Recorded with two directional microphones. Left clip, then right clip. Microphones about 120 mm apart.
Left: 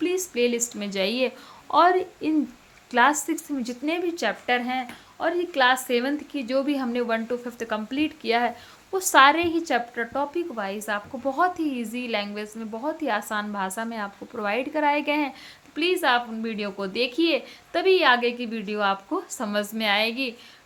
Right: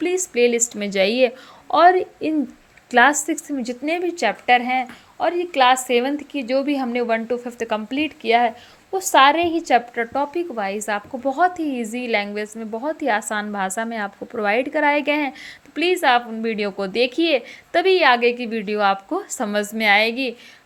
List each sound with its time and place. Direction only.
0.0 s a woman's voice: 40° right (ahead or behind)
8.9 s a woman's voice: 15° right (ahead or behind); by 19.5 s 50° right (ahead or behind)
19.5 s a woman's voice: 40° right (ahead or behind)